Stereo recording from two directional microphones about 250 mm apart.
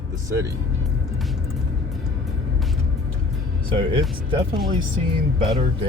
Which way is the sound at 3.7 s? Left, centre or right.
Centre.